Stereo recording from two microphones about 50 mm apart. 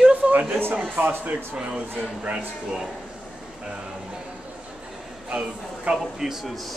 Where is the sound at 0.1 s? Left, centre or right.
Right.